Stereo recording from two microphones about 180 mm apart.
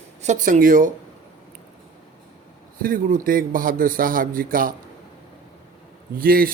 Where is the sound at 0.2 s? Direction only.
45° right (ahead or behind).